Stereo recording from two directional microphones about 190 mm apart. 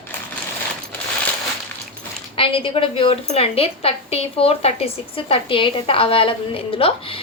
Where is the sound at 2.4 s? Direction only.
30° left (ahead or behind).